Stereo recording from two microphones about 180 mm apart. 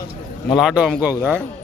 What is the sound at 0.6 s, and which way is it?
Speech, centre (ahead or behind).